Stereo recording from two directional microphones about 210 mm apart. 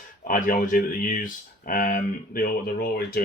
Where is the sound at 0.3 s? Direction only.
40° left (ahead or behind).